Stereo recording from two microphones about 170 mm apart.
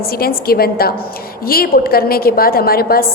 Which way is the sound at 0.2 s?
60° left (ahead or behind).